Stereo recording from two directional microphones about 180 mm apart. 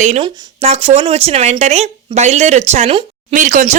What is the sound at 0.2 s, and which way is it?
Speech, 35° right (ahead or behind).